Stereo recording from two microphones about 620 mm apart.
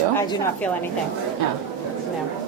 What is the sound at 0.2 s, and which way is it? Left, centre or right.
Speech, centre.